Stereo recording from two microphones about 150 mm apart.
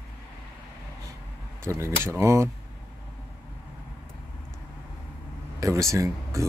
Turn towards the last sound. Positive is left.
turn(degrees=-20)  # may be behind; listen again after turning